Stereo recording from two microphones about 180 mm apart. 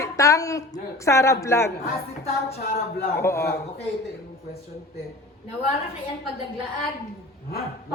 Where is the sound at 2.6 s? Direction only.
55° left (ahead or behind).